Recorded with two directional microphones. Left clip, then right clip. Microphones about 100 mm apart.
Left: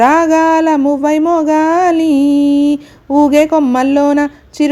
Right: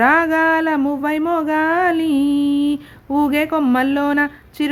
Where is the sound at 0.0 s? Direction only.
30° left (ahead or behind).